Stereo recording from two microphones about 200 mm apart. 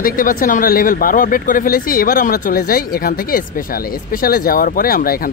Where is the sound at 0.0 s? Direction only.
45° left (ahead or behind).